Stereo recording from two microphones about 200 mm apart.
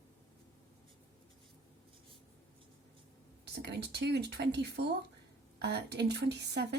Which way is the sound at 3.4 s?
55° right (ahead or behind).